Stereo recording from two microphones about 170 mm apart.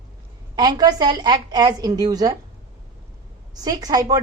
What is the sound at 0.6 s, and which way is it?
A woman's voice, 25° right (ahead or behind).